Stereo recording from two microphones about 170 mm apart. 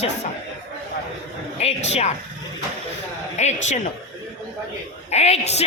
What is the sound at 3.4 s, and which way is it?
Speech, 40° left (ahead or behind).